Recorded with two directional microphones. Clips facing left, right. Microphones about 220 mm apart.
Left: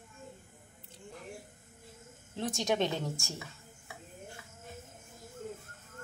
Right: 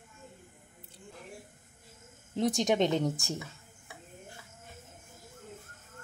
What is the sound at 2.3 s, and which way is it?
Speech, 15° right (ahead or behind).